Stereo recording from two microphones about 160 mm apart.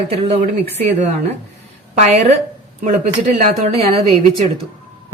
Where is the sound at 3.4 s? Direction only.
40° right (ahead or behind).